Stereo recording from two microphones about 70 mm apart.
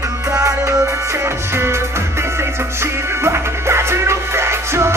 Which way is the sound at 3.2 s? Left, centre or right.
Right.